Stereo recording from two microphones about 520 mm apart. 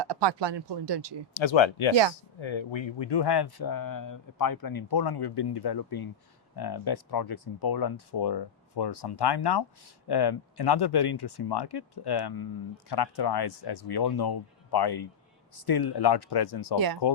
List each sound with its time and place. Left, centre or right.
0.0 s speech: right
1.4 s speech: left
7.3 s speech: left
7.7 s speech: left
16.7 s speech: right